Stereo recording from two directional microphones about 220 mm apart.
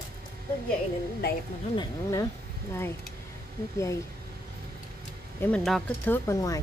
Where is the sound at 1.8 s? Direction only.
15° left (ahead or behind).